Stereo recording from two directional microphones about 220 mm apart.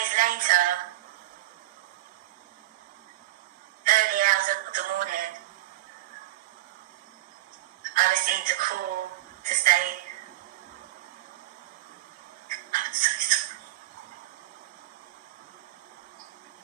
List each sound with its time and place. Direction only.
0.0 s speech: 40° right (ahead or behind)
3.8 s music: 40° right (ahead or behind)
7.8 s a sound: 40° right (ahead or behind)
12.5 s music: 40° right (ahead or behind)